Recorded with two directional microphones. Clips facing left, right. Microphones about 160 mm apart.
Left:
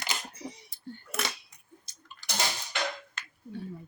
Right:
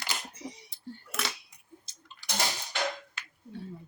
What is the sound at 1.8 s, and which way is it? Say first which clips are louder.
Bathtub: left 1 dB; 25° right (ahead or behind).